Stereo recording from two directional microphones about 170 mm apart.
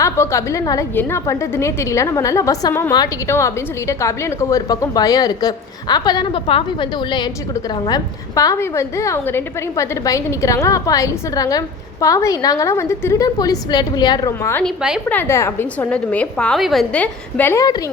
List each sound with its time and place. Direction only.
0.0 s a woman's voice: 15° left (ahead or behind)
14.6 s a woman's voice: 5° right (ahead or behind)
15.1 s a woman's voice: 15° left (ahead or behind)